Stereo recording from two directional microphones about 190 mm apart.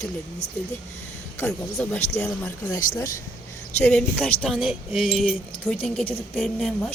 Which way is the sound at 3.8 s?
5° left (ahead or behind).